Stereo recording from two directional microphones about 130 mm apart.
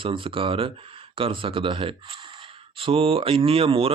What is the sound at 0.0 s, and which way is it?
Speech, 40° right (ahead or behind).